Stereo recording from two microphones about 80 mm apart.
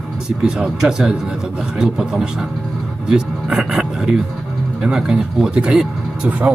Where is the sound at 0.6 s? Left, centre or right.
Centre.